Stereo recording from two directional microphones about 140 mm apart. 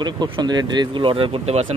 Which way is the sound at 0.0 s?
30° right (ahead or behind).